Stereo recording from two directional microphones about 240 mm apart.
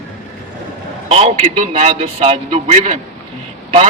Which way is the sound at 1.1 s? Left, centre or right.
Right.